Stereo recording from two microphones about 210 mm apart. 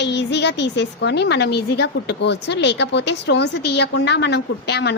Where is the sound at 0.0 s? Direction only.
55° left (ahead or behind).